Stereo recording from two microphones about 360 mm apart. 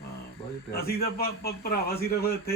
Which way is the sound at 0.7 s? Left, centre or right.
Left.